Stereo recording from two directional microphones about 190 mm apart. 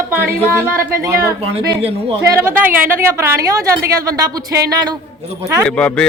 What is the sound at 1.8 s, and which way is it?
Speech, 30° right (ahead or behind).